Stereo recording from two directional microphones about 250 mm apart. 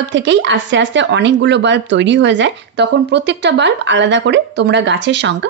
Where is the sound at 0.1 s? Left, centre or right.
Right.